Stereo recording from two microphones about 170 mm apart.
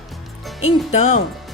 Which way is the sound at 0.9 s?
40° left (ahead or behind).